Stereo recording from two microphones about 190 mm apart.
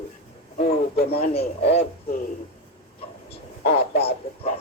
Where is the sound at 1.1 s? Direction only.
30° left (ahead or behind).